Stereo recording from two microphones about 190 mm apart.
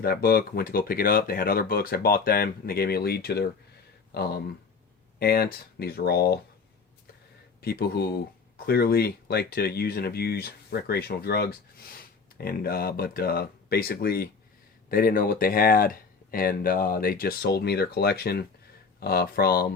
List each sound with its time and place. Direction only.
0.0 s speech: 55° left (ahead or behind)
7.6 s speech: 55° left (ahead or behind)